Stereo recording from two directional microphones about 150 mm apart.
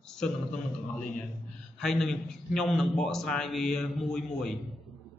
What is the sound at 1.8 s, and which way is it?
A man's voice, 5° left (ahead or behind).